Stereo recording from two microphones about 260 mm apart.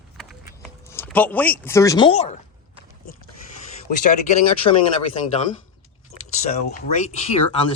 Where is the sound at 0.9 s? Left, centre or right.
Centre.